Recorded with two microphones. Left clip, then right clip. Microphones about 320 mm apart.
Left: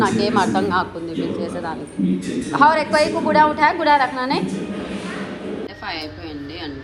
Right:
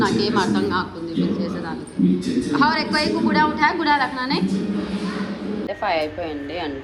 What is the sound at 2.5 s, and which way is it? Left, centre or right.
A woman's voice, centre.